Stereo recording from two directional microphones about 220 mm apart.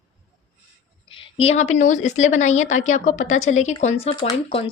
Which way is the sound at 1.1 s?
25° left (ahead or behind).